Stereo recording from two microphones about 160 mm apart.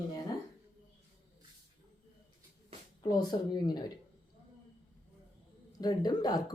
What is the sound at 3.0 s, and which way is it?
Speech, 25° left (ahead or behind).